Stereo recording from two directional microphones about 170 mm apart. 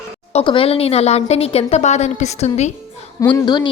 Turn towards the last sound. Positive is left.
turn(degrees=25)  # may be behind; listen again after turning